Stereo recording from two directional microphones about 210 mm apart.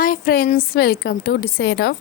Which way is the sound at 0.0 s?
45° left (ahead or behind).